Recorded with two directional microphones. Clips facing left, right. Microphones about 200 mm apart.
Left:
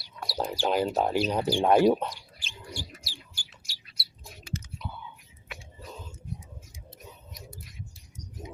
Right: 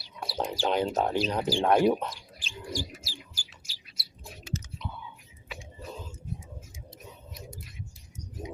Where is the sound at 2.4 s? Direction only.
40° right (ahead or behind).